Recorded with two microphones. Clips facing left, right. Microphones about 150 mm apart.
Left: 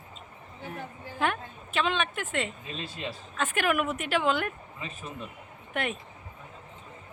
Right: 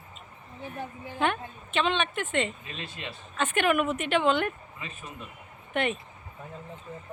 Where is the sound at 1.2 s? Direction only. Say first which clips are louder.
Right 1 dB; centre (ahead or behind).